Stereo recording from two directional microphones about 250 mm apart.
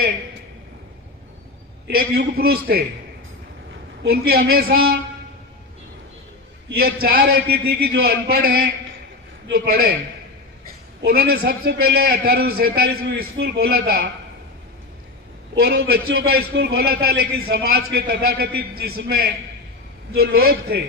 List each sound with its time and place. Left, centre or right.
1.9 s a man's voice: right
4.1 s a man's voice: right
6.7 s a man's voice: right
11.0 s a man's voice: right
15.5 s a man's voice: right